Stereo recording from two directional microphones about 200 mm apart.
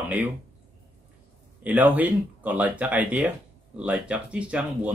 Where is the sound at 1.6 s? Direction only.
10° right (ahead or behind).